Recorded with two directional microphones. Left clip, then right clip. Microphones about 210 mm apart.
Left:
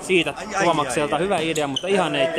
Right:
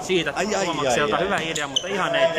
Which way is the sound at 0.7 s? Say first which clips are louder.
Left 4 dB; 25° left (ahead or behind).